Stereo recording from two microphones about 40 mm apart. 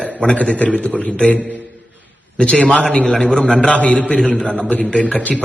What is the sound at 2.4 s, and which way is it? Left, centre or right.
Speech, left.